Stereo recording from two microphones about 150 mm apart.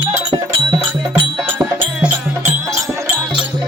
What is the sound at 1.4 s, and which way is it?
Music, 10° right (ahead or behind).